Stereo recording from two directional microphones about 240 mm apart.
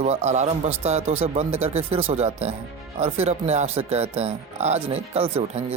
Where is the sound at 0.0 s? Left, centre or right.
Right.